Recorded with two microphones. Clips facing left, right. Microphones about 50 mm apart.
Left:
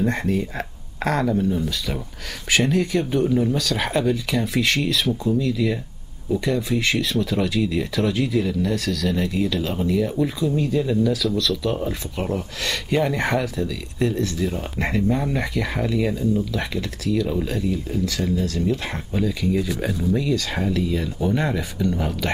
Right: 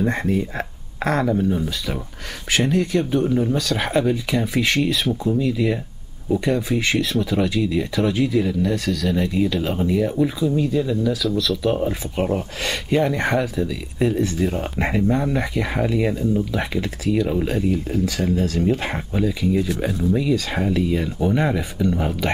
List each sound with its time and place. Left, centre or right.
0.0 s speech: centre
2.5 s speech: centre
14.4 s speech: centre
15.1 s speech: centre
18.7 s speech: right
18.9 s speech: centre